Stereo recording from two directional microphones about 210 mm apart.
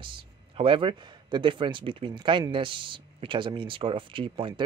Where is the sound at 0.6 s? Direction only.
25° right (ahead or behind).